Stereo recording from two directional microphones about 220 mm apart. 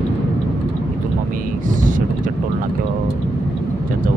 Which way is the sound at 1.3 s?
35° right (ahead or behind).